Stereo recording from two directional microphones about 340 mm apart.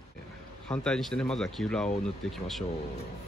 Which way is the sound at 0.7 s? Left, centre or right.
Centre.